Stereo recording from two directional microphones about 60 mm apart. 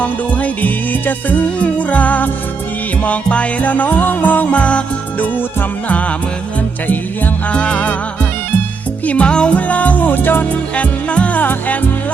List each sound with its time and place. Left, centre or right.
0.0 s music: left
7.5 s music: centre
9.0 s music: left